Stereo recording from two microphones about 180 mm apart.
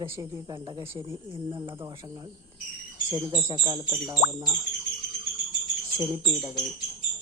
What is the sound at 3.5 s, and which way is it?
Speech, 25° right (ahead or behind).